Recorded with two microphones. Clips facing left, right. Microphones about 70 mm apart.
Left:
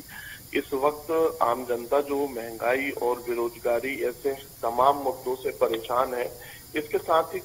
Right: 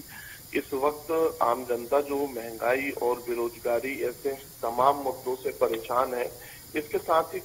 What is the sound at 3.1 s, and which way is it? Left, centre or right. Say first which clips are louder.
Speech: left 1 dB; left.